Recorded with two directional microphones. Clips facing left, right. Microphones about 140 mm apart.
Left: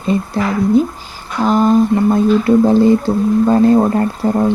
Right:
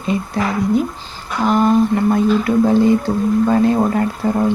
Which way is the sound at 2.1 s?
30° left (ahead or behind).